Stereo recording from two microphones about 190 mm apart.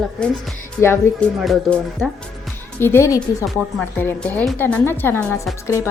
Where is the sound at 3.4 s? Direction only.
Centre (ahead or behind).